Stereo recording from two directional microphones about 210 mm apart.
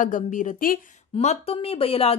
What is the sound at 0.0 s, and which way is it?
Speech, 35° left (ahead or behind).